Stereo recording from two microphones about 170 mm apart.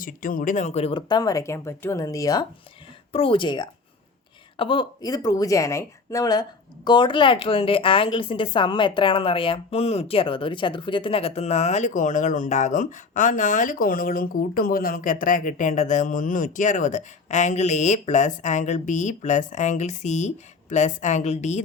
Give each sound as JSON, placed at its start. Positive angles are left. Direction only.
{"t": 0.0, "sound": "speech", "side_deg": 55}
{"t": 3.1, "sound": "a woman's voice", "side_deg": 35}